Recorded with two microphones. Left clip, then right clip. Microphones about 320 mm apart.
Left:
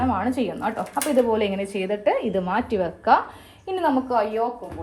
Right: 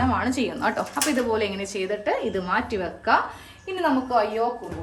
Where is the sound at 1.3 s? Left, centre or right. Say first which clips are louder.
Left 2 dB; centre.